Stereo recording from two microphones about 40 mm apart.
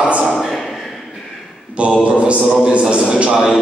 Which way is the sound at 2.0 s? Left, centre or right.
Right.